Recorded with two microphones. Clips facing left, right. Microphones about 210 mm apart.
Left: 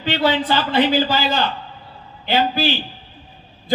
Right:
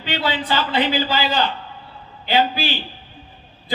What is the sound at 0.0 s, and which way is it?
A man's voice, 45° left (ahead or behind).